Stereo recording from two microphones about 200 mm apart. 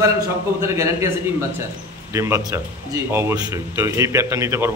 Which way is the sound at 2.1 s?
15° right (ahead or behind).